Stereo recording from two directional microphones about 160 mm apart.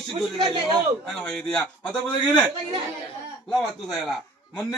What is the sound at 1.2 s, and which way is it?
Speech, 5° left (ahead or behind).